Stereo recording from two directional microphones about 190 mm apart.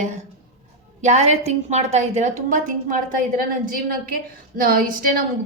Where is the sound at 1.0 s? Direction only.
35° right (ahead or behind).